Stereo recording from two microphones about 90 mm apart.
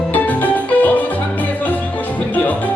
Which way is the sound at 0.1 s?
20° left (ahead or behind).